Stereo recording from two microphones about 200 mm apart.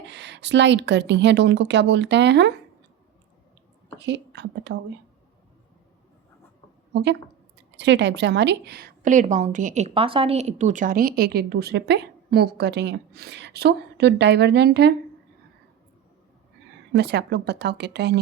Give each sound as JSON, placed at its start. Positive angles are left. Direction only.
{"t": 0.1, "sound": "speech", "side_deg": -60}
{"t": 3.9, "sound": "speech", "side_deg": -60}
{"t": 6.9, "sound": "a woman's voice", "side_deg": -60}
{"t": 16.9, "sound": "speech", "side_deg": -55}